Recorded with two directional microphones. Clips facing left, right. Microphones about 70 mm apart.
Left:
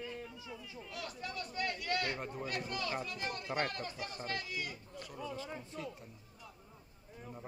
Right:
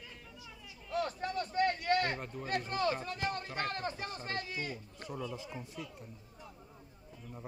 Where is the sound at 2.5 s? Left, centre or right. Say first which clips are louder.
Right 8 dB; right.